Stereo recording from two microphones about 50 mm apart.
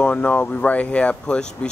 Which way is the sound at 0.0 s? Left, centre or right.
Left.